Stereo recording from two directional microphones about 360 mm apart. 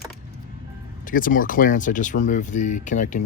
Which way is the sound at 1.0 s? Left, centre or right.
Left.